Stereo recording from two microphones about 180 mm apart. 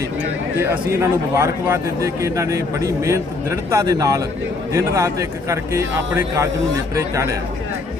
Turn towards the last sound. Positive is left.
turn(degrees=-15)  # may be behind; listen again after turning